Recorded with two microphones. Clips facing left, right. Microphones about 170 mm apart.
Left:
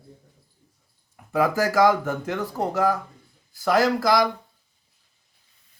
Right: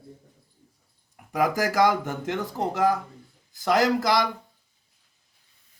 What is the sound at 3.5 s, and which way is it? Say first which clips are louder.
Speech: left 1 dB; 20° right (ahead or behind).